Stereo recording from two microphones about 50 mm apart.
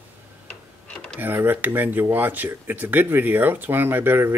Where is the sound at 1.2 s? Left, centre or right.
Right.